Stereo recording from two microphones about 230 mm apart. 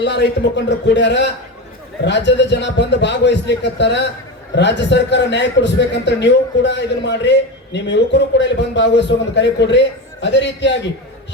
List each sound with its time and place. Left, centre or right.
0.0 s a man's voice: left